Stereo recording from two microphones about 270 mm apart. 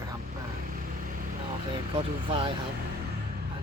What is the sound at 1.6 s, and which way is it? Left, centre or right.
Speech, centre.